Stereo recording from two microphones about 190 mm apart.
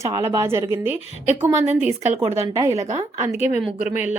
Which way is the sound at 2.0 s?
35° right (ahead or behind).